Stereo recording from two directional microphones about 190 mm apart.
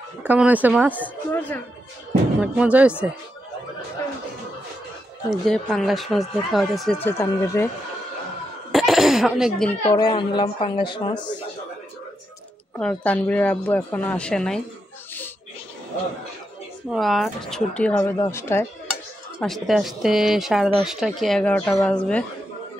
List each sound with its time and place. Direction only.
0.2 s speech: 10° right (ahead or behind)
0.9 s speech: 10° left (ahead or behind)
2.4 s speech: 5° right (ahead or behind)
5.3 s speech: centre (ahead or behind)
7.1 s speech: 15° left (ahead or behind)
8.7 s cough: centre (ahead or behind)
9.8 s a woman's voice: 20° left (ahead or behind)
12.7 s speech: 5° left (ahead or behind)
16.9 s speech: centre (ahead or behind)
19.4 s speech: centre (ahead or behind)